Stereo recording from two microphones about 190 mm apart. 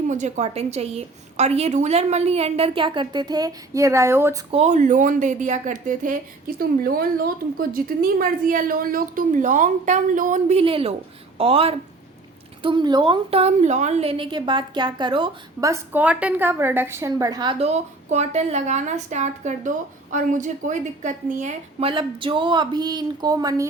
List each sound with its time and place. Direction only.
0.1 s a woman's voice: 40° right (ahead or behind); by 4.4 s 15° right (ahead or behind)
4.5 s a woman's voice: 35° right (ahead or behind)
15.7 s a woman's voice: 10° right (ahead or behind)